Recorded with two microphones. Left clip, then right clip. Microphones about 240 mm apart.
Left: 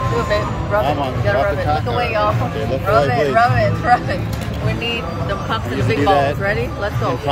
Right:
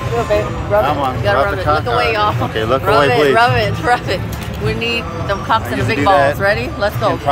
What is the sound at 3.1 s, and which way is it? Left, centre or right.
Speech, right.